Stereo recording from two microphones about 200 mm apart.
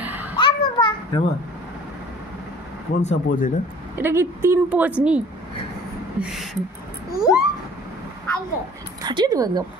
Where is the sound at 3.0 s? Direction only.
40° left (ahead or behind).